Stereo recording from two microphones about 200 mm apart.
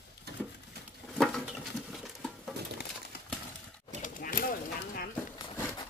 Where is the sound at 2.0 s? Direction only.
Centre (ahead or behind).